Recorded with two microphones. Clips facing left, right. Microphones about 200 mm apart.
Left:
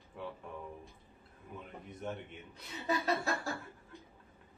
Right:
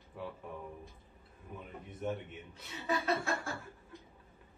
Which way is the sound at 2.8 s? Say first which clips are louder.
Even; 35° left (ahead or behind).